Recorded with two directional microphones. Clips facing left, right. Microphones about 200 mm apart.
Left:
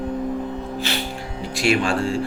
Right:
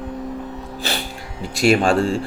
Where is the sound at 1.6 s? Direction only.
40° right (ahead or behind).